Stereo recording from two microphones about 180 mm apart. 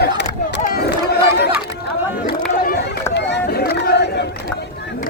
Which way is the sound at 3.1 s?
70° left (ahead or behind).